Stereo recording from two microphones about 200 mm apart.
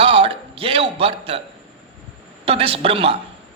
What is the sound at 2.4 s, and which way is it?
Speech, 30° right (ahead or behind).